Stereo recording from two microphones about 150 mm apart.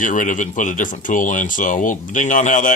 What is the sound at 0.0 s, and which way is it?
Speech, 60° left (ahead or behind).